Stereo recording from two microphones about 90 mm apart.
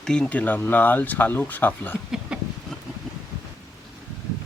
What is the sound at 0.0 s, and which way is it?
Speech, 10° left (ahead or behind).